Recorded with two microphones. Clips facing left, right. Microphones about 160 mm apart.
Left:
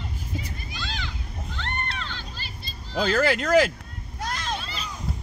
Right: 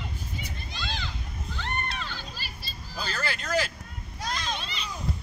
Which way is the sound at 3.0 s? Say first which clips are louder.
Left 11 dB; 90° left.